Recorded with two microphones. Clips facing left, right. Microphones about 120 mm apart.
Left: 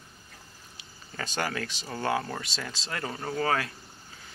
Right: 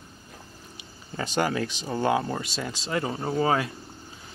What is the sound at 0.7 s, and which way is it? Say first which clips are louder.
Speech: right 5 dB; 20° right (ahead or behind).